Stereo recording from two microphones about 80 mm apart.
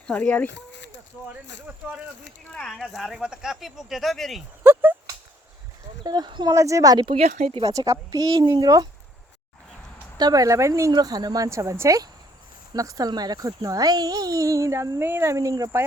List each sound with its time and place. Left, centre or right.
0.1 s speech: centre
1.3 s speech: centre
2.5 s speech: centre
4.6 s a sound: right
6.0 s speech: right
6.5 s speech: right
6.9 s speech: right
7.6 s a child's voice: right
10.2 s a child's voice: right
10.9 s speech: right
11.4 s a child's voice: right